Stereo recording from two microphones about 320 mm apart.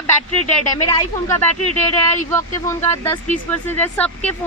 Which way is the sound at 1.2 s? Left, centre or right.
Centre.